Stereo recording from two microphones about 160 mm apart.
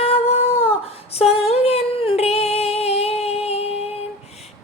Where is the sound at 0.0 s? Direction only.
40° left (ahead or behind).